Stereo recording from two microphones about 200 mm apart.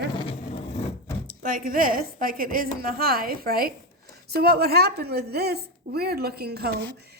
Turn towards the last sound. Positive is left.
turn(degrees=-55)  # may be behind; listen again after turning